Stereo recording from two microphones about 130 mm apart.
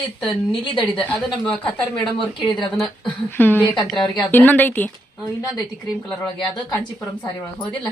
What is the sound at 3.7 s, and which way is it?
Speech, centre (ahead or behind).